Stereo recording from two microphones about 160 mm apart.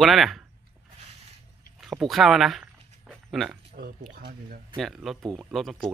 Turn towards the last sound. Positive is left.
turn(degrees=0)  # may be behind; listen again after turning